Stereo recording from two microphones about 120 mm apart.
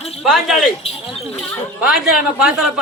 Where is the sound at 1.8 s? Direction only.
5° right (ahead or behind).